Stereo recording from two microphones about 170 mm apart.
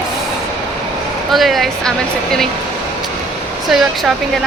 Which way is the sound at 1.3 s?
Centre (ahead or behind).